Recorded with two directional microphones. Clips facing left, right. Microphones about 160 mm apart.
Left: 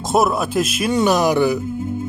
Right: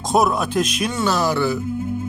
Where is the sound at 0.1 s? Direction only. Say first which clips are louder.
Left 1 dB; centre (ahead or behind).